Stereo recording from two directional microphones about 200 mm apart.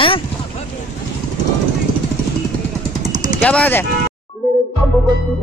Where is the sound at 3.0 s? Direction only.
40° right (ahead or behind).